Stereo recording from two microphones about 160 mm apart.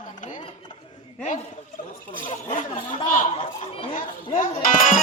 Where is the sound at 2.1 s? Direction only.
50° left (ahead or behind).